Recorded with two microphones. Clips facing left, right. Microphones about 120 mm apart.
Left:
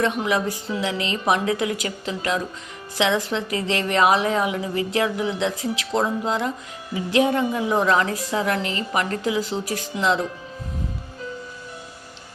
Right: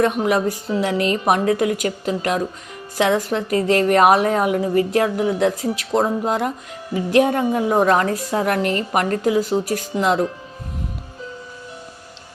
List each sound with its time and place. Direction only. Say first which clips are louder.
0.0 s a woman's voice: right 4 dB; 50° right (ahead or behind)